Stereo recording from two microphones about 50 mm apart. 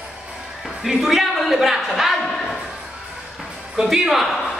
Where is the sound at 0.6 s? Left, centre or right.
Centre.